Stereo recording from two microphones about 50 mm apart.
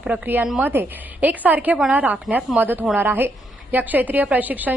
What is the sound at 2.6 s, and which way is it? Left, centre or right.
A woman's voice, right.